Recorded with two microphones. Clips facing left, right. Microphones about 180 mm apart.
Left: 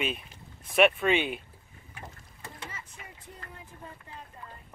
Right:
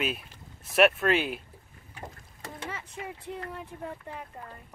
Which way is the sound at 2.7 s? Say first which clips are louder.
Right 9 dB; 70° right (ahead or behind).